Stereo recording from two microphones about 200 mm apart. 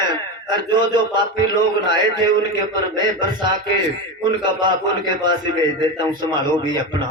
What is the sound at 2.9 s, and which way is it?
A man's voice, 20° right (ahead or behind).